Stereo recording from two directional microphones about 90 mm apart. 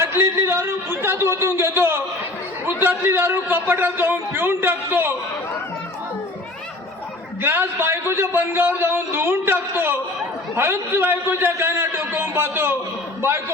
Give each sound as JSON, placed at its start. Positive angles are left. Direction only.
{"t": 0.0, "sound": "a sound", "side_deg": -25}
{"t": 2.6, "sound": "a man's voice", "side_deg": -25}
{"t": 7.4, "sound": "a man's voice", "side_deg": -25}